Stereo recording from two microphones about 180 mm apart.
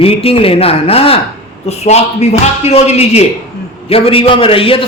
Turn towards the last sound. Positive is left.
turn(degrees=30)  # may be behind; listen again after turning